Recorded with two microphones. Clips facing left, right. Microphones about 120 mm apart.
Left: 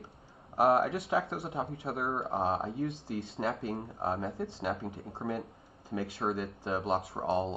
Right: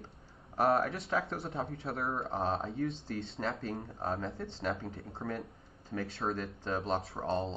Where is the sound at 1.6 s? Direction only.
25° left (ahead or behind).